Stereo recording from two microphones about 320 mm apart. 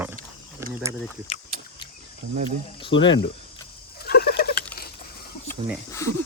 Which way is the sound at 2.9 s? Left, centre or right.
Left.